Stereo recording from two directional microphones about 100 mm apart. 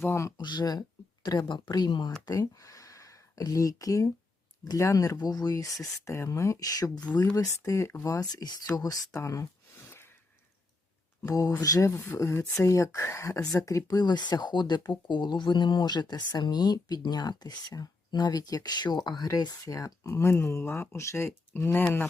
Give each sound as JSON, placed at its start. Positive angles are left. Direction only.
{"t": 0.0, "sound": "speech", "side_deg": 25}
{"t": 0.3, "sound": "speech", "side_deg": 45}
{"t": 9.9, "sound": "a sound", "side_deg": 25}
{"t": 11.2, "sound": "speech", "side_deg": 40}